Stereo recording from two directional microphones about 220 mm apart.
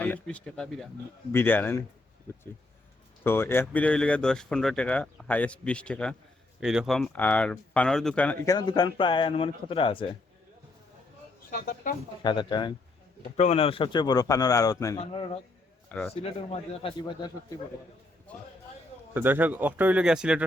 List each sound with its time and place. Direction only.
0.0 s speech: 5° left (ahead or behind)
3.2 s speech: 10° left (ahead or behind)
8.5 s a man's voice: 20° left (ahead or behind)
11.5 s speech: 40° left (ahead or behind)
12.2 s a man's voice: 20° left (ahead or behind)
15.0 s a man's voice: 25° left (ahead or behind)
15.9 s a man's voice: 5° left (ahead or behind)
16.2 s a man's voice: 25° left (ahead or behind)
19.1 s speech: 10° right (ahead or behind)